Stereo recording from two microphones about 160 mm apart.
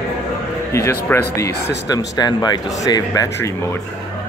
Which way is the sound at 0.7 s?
15° left (ahead or behind).